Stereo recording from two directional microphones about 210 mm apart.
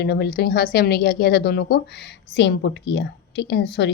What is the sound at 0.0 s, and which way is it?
Speech, 50° left (ahead or behind).